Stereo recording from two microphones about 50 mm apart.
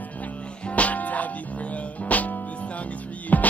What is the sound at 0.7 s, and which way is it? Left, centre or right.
Music, left.